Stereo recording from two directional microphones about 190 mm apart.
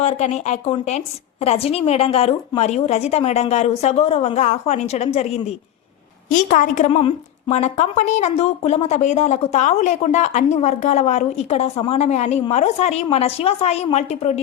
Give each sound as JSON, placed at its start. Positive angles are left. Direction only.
{"t": 0.0, "sound": "a woman's voice", "side_deg": 35}